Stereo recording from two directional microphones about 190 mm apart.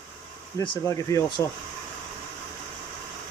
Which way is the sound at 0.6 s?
20° left (ahead or behind).